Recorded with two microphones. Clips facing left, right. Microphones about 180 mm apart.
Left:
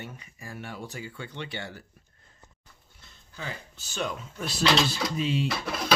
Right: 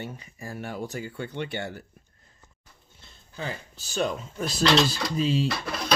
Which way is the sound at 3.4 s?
35° right (ahead or behind).